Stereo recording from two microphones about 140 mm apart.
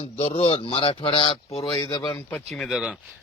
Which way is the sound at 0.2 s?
45° left (ahead or behind).